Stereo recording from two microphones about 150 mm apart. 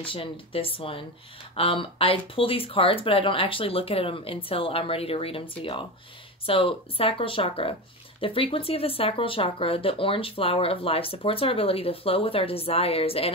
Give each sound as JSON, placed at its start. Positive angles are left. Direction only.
{"t": 0.0, "sound": "speech", "side_deg": 35}